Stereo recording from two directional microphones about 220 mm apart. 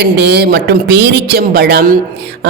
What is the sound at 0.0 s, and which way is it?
Speech, 50° right (ahead or behind).